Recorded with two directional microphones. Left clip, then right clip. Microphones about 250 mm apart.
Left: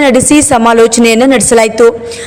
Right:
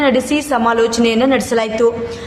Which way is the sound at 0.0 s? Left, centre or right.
Left.